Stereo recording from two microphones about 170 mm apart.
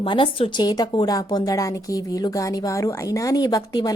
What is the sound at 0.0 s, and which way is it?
A woman's voice, 30° left (ahead or behind).